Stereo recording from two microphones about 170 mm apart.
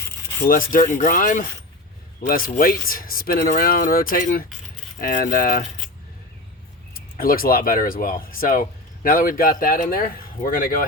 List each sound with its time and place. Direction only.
0.4 s speech: 55° left (ahead or behind)
6.9 s speech: 60° left (ahead or behind)